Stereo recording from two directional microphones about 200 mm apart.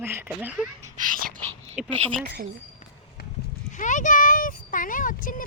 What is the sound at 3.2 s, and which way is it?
Livestock, 50° left (ahead or behind).